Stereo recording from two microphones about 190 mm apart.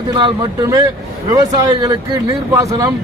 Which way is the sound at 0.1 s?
20° right (ahead or behind).